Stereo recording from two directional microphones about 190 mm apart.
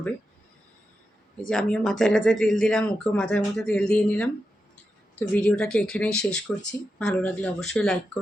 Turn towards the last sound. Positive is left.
turn(degrees=5)  # may be behind; listen again after turning